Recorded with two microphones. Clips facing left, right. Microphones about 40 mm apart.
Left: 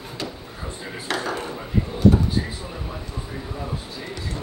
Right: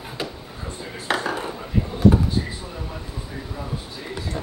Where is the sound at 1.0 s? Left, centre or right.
Centre.